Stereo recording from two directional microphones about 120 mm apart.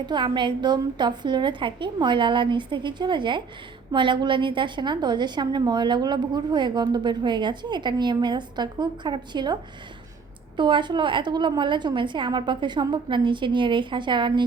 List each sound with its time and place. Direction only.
0.0 s a woman's voice: 40° right (ahead or behind)
10.6 s a woman's voice: 40° right (ahead or behind)